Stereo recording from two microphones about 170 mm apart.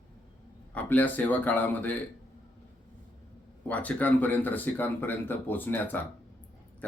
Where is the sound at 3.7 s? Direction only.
10° left (ahead or behind).